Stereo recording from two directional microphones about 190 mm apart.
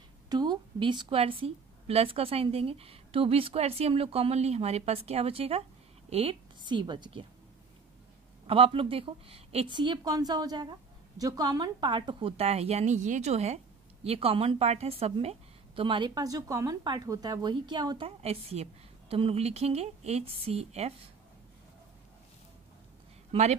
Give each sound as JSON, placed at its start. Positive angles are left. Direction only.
{"t": 0.3, "sound": "a woman's voice", "side_deg": -20}
{"t": 8.5, "sound": "a woman's voice", "side_deg": -30}